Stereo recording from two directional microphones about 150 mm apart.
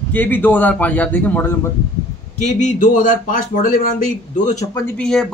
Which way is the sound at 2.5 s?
55° left (ahead or behind).